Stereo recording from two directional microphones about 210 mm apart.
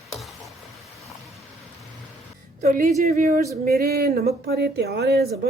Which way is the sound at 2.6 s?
40° right (ahead or behind).